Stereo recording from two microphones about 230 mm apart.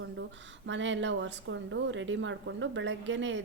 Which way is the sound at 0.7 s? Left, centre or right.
Right.